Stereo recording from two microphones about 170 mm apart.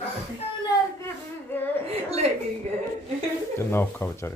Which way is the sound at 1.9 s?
35° right (ahead or behind).